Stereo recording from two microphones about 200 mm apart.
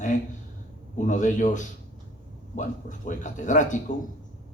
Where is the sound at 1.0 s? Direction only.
40° left (ahead or behind).